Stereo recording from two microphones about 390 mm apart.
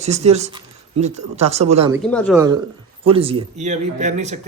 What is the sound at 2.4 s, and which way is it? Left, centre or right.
Speech, centre.